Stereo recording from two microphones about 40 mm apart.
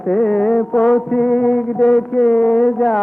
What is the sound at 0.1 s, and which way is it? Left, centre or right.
Music, centre.